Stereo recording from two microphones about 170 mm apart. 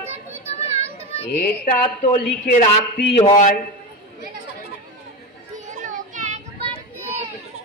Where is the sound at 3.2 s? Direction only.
40° left (ahead or behind).